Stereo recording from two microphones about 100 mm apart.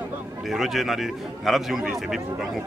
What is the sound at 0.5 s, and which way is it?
A man's voice, centre (ahead or behind).